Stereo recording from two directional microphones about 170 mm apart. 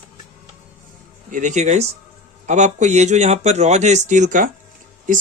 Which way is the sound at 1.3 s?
45° right (ahead or behind).